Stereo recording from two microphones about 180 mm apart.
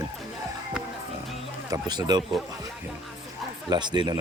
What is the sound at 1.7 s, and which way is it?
Speech, 25° right (ahead or behind).